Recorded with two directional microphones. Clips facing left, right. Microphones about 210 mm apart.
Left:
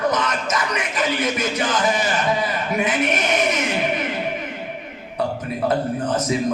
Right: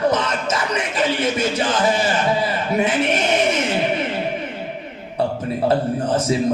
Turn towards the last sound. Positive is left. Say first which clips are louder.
# right 2 dB
turn(degrees=-30)  # may be behind; listen again after turning